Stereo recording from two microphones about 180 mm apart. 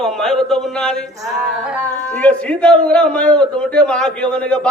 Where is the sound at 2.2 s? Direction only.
5° left (ahead or behind).